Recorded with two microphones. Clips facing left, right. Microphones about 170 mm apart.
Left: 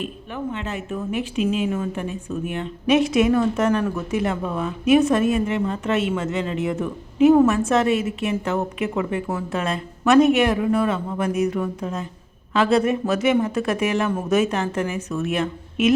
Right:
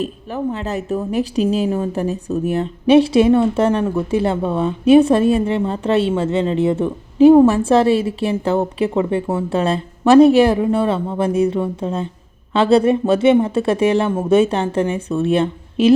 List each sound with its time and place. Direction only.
0.0 s speech: 35° right (ahead or behind)